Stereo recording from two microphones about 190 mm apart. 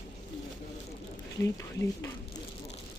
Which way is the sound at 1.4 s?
15° left (ahead or behind).